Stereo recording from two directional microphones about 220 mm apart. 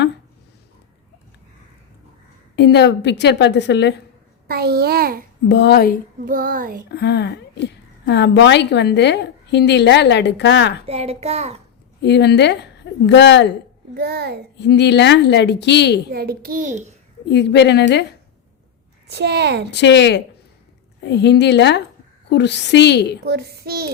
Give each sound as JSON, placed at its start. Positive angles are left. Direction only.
{"t": 2.6, "sound": "a woman's voice", "side_deg": 50}
{"t": 4.4, "sound": "a child's voice", "side_deg": -45}
{"t": 5.5, "sound": "a woman's voice", "side_deg": 50}
{"t": 6.2, "sound": "a child's voice", "side_deg": -40}
{"t": 6.8, "sound": "a woman's voice", "side_deg": 50}
{"t": 10.8, "sound": "a child's voice", "side_deg": -25}
{"t": 12.0, "sound": "a woman's voice", "side_deg": 50}
{"t": 13.9, "sound": "a child's voice", "side_deg": -45}
{"t": 14.6, "sound": "a woman's voice", "side_deg": 50}
{"t": 16.1, "sound": "a child's voice", "side_deg": -45}
{"t": 17.2, "sound": "a woman's voice", "side_deg": 50}
{"t": 19.0, "sound": "a child's voice", "side_deg": -50}
{"t": 19.7, "sound": "a woman's voice", "side_deg": 50}
{"t": 23.2, "sound": "a child's voice", "side_deg": -45}